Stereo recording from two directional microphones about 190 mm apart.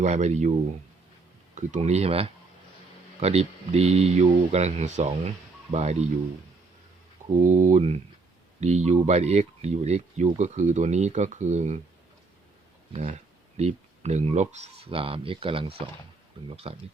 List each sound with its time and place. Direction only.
0.0 s speech: 35° right (ahead or behind)
1.5 s speech: 35° right (ahead or behind)
7.4 s speech: 40° right (ahead or behind)
12.9 s speech: 30° right (ahead or behind)